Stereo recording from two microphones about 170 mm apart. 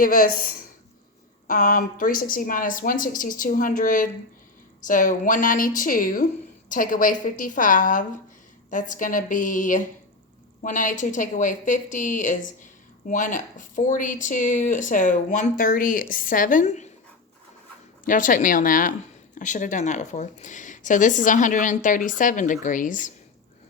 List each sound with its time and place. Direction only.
0.0 s speech: 60° left (ahead or behind); by 16.9 s 45° left (ahead or behind)
18.0 s speech: 50° left (ahead or behind)